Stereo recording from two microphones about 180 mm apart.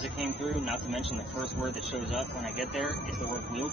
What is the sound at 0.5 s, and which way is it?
Speech, centre (ahead or behind).